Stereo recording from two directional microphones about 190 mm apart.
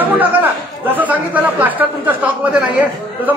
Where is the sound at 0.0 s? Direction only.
10° right (ahead or behind).